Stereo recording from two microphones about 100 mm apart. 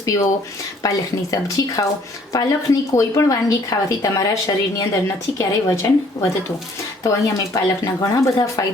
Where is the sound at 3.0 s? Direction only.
35° left (ahead or behind).